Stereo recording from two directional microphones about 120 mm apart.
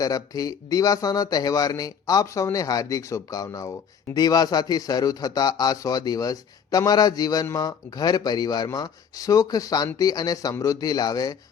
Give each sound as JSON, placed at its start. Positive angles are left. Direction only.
{"t": 0.0, "sound": "a man's voice", "side_deg": 30}